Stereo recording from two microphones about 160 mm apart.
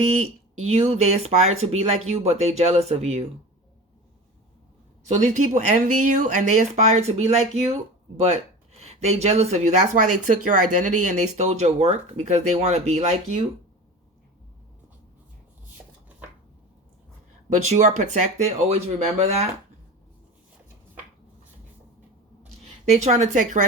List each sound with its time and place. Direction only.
0.1 s speech: 45° right (ahead or behind)
5.0 s speech: 50° right (ahead or behind)
17.5 s speech: 45° right (ahead or behind)
23.0 s speech: 45° right (ahead or behind)